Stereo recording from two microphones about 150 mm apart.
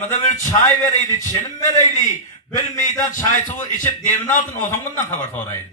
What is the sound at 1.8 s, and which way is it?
A man's voice, 55° left (ahead or behind).